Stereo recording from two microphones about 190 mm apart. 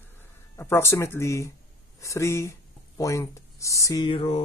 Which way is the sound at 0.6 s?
15° left (ahead or behind).